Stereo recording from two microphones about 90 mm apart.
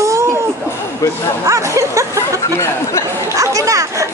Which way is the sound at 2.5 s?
35° left (ahead or behind).